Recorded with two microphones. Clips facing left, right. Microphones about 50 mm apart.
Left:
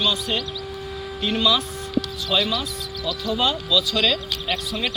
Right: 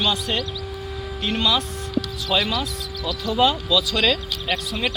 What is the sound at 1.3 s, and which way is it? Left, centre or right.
Speech, right.